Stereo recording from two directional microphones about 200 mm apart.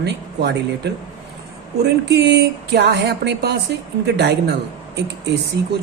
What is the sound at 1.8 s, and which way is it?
A woman's voice, 55° right (ahead or behind).